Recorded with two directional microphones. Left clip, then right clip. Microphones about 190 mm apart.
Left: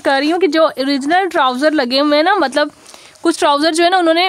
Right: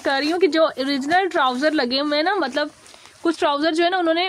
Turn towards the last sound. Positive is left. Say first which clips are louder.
# left 7 dB
turn(degrees=35)  # may be behind; listen again after turning